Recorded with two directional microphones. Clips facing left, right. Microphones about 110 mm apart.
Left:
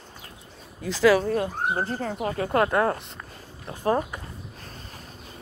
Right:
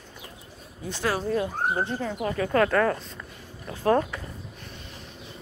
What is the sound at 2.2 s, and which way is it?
Speech, 30° left (ahead or behind).